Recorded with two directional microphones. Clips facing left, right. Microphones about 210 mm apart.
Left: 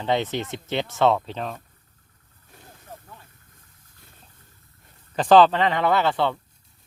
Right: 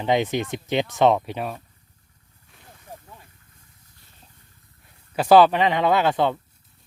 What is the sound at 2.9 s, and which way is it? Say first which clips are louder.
Vehicle: right 1 dB; 15° right (ahead or behind).